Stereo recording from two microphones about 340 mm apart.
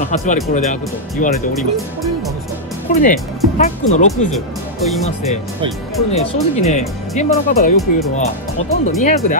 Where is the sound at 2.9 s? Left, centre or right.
Left.